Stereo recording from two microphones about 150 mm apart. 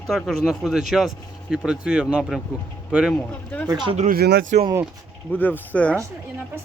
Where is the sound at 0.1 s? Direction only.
Centre (ahead or behind).